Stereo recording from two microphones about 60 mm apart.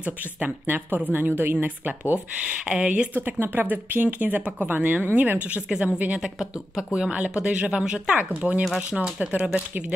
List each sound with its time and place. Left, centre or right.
0.0 s speech: right
2.6 s speech: centre
3.2 s speech: right